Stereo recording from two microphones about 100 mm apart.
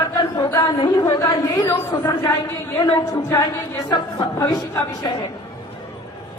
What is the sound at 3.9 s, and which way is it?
Speech, 40° left (ahead or behind).